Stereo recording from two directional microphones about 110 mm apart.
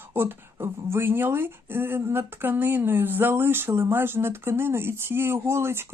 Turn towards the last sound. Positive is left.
turn(degrees=-25)  # may be behind; listen again after turning